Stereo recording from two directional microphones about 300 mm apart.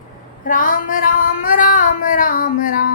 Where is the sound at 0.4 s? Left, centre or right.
Left.